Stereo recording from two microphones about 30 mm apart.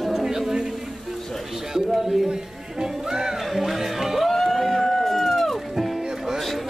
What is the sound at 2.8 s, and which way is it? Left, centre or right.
Music, right.